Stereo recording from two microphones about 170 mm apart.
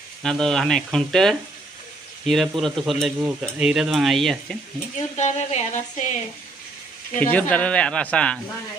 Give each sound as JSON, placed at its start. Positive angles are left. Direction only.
{"t": 0.2, "sound": "speech", "side_deg": 5}
{"t": 5.1, "sound": "a sound", "side_deg": 40}
{"t": 7.2, "sound": "speech", "side_deg": 10}